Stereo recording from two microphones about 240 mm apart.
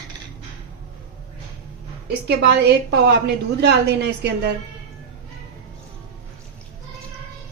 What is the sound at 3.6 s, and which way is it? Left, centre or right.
Speech, right.